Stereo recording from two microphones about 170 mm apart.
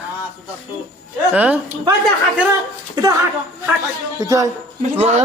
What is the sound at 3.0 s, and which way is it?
Speech, 25° right (ahead or behind).